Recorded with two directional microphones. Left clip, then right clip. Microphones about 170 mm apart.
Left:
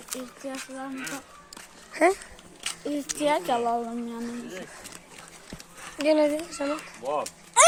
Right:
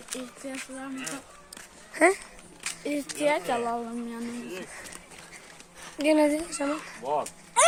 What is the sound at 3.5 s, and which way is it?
Speech, centre (ahead or behind).